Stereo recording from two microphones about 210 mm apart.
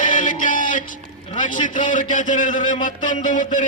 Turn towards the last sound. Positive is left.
turn(degrees=35)  # may be behind; listen again after turning